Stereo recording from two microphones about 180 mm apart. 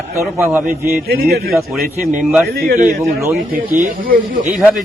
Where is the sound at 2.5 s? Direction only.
55° right (ahead or behind).